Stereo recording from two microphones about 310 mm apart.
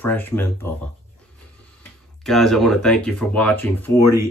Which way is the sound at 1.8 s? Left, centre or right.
Centre.